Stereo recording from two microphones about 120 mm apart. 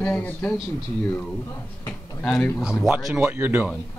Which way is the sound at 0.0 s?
15° left (ahead or behind).